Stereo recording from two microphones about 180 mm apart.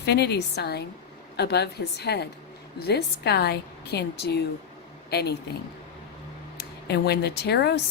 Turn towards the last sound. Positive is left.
turn(degrees=65)  # may be behind; listen again after turning